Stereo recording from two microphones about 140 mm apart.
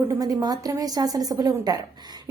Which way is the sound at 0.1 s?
25° right (ahead or behind).